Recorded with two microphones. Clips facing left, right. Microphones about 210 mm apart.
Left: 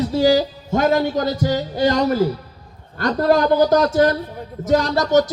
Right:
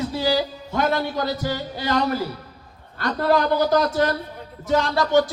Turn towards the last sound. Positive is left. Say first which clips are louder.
# left 3 dB
turn(degrees=40)  # may be behind; listen again after turning